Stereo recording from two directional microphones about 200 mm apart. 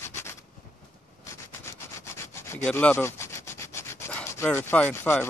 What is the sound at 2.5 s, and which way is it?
Rub, 10° left (ahead or behind).